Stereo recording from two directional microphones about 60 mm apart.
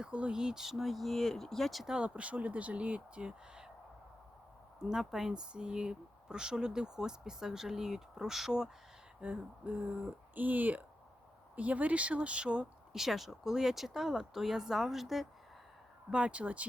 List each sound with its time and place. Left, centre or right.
0.0 s speech: centre
2.0 s speech: centre
4.8 s speech: centre
9.2 s speech: right; by 15.3 s centre
16.0 s speech: centre